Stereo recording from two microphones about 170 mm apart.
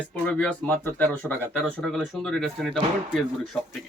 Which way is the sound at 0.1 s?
5° left (ahead or behind).